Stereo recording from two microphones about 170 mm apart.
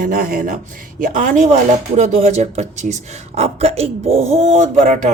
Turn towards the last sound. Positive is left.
turn(degrees=-45)  # may be behind; listen again after turning